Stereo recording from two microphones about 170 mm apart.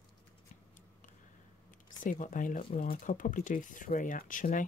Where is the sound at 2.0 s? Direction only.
50° left (ahead or behind).